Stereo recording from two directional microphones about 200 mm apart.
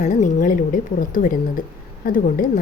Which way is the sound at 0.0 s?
40° left (ahead or behind).